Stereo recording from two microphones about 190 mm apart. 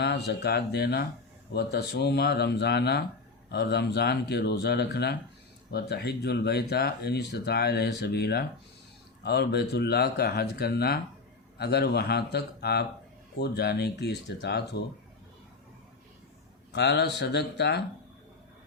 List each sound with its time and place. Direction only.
0.3 s speech: 60° left (ahead or behind)
16.7 s speech: 60° left (ahead or behind)